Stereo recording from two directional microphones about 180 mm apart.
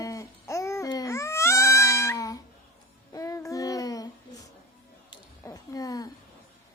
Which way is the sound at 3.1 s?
20° left (ahead or behind).